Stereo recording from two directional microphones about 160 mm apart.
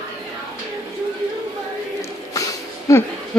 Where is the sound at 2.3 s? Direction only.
20° left (ahead or behind).